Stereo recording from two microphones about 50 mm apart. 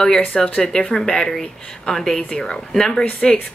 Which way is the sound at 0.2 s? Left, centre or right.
Centre.